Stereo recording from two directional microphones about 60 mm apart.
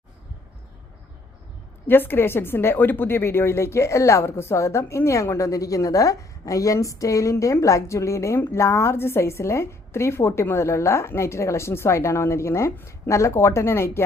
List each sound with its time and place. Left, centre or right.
1.9 s a woman's voice: left